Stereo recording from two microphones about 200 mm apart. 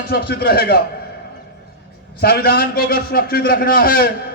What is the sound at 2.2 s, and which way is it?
A man's voice, 50° left (ahead or behind).